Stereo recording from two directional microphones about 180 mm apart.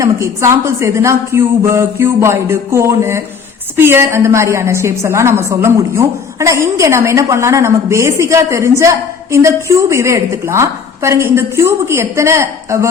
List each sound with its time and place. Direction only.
0.0 s a woman's voice: 15° right (ahead or behind)